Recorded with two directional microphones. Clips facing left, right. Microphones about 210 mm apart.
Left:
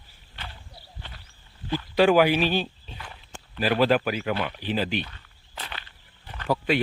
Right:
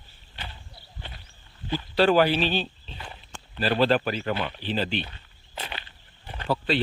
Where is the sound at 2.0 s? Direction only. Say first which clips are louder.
Left 1 dB; 10° left (ahead or behind).